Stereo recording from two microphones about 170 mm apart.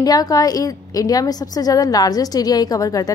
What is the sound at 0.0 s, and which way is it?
A woman's voice, 20° left (ahead or behind).